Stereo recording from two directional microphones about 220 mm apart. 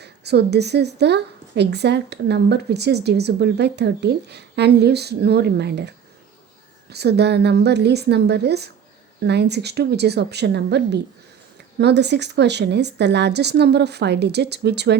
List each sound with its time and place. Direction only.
0.0 s a woman's voice: 50° right (ahead or behind)
6.9 s a woman's voice: 50° right (ahead or behind)